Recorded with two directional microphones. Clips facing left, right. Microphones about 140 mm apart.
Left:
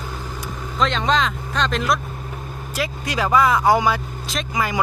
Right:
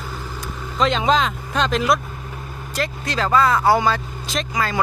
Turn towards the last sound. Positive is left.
turn(degrees=15)  # may be behind; listen again after turning